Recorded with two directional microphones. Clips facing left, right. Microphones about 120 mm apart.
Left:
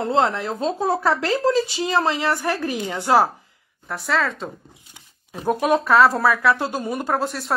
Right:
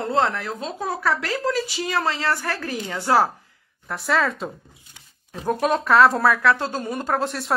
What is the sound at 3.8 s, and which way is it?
Speech, centre (ahead or behind).